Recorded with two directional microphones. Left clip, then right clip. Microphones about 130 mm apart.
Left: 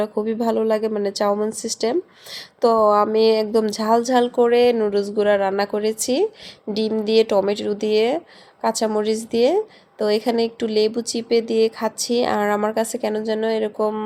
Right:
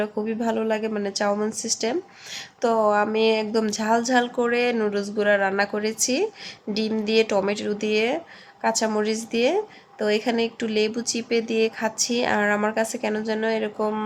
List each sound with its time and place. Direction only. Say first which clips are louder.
0.0 s a woman's voice: left 4 dB; 30° left (ahead or behind)